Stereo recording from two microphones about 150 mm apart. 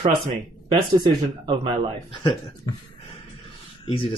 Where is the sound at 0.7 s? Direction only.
35° right (ahead or behind).